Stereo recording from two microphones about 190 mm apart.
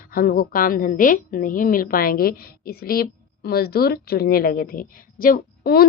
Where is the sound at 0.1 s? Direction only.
50° left (ahead or behind).